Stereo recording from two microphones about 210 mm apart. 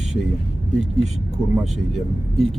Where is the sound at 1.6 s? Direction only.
Centre (ahead or behind).